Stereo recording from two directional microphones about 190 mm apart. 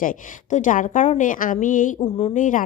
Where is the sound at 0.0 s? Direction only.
45° left (ahead or behind).